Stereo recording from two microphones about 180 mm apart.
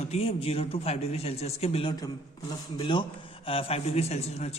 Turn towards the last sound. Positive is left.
turn(degrees=35)  # may be behind; listen again after turning